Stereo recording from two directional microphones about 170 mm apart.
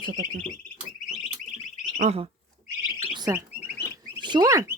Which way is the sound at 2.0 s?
40° right (ahead or behind).